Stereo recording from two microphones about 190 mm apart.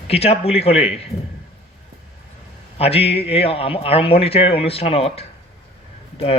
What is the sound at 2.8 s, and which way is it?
Speech, 30° left (ahead or behind).